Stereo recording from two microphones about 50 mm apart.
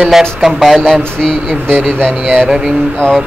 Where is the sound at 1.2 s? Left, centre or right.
Centre.